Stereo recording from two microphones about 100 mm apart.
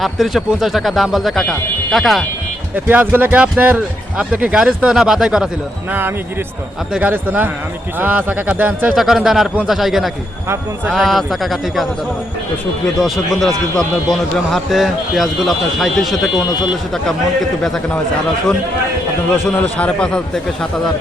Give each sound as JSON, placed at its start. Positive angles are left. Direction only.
{"t": 0.0, "sound": "speech", "side_deg": 0}
{"t": 2.7, "sound": "speech", "side_deg": -15}
{"t": 5.9, "sound": "a man's voice", "side_deg": -20}
{"t": 9.0, "sound": "speech", "side_deg": -5}
{"t": 13.0, "sound": "speech", "side_deg": 0}
{"t": 14.5, "sound": "speech", "side_deg": 0}
{"t": 16.4, "sound": "a man's voice", "side_deg": 45}
{"t": 19.5, "sound": "a man's voice", "side_deg": 20}
{"t": 20.0, "sound": "speech", "side_deg": 10}